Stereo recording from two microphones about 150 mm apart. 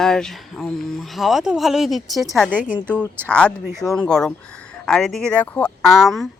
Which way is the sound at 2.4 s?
10° right (ahead or behind).